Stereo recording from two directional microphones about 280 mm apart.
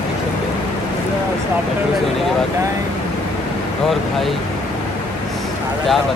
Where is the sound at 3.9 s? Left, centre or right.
Centre.